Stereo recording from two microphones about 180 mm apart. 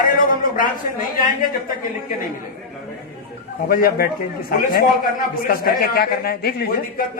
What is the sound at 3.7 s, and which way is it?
A man's voice, 55° left (ahead or behind).